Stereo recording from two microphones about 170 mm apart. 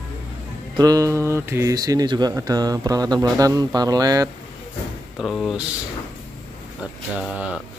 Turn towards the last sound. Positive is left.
turn(degrees=-5)  # may be behind; listen again after turning